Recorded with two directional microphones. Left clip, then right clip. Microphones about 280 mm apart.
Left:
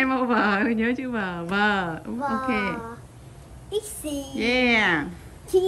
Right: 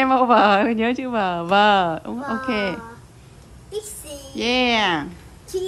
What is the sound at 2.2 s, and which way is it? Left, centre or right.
Speech, centre.